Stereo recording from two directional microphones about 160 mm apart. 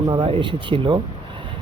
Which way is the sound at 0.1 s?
30° right (ahead or behind).